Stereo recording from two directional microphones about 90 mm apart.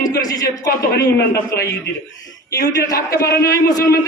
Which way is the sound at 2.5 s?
40° left (ahead or behind).